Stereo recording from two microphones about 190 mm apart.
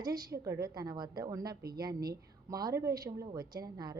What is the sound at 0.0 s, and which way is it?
Speech, 20° right (ahead or behind).